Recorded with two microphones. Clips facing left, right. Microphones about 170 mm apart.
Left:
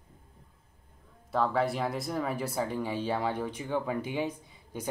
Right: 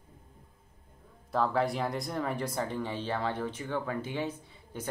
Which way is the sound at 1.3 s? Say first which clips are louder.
Left 1 dB; centre (ahead or behind).